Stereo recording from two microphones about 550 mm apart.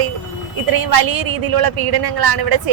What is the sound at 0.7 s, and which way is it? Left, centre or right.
A woman's voice, right.